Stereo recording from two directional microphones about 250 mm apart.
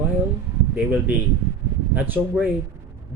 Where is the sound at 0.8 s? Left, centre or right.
Centre.